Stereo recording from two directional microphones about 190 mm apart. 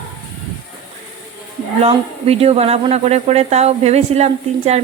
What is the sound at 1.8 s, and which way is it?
Speech, 30° right (ahead or behind).